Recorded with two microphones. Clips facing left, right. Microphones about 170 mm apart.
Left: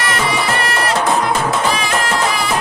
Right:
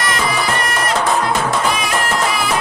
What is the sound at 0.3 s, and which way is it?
Music, 25° left (ahead or behind).